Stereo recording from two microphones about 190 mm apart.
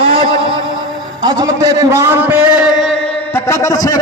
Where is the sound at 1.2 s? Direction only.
20° right (ahead or behind); by 3.1 s 5° left (ahead or behind).